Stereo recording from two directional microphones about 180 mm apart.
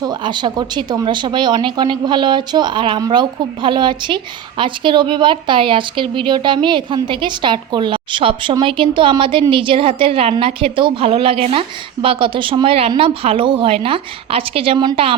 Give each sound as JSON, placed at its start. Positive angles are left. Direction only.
{"t": 0.0, "sound": "speech", "side_deg": -25}